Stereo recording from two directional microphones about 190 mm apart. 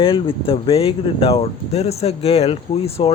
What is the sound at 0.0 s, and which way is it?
Speech, 30° left (ahead or behind).